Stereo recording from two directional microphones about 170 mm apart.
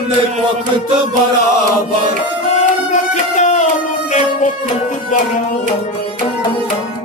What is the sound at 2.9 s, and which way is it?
Music, 45° left (ahead or behind).